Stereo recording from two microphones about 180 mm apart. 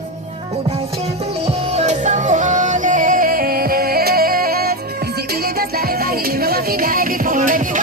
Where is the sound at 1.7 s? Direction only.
40° right (ahead or behind).